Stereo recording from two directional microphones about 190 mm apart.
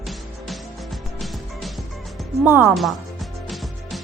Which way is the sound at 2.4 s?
10° right (ahead or behind).